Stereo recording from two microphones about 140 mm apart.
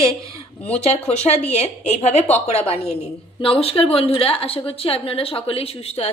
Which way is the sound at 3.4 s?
40° left (ahead or behind).